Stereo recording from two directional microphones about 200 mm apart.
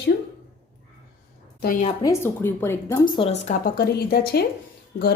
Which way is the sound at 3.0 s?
25° left (ahead or behind).